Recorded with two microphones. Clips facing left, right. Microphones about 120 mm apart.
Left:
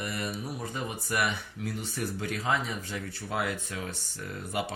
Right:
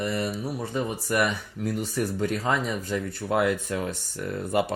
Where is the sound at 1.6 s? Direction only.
45° right (ahead or behind).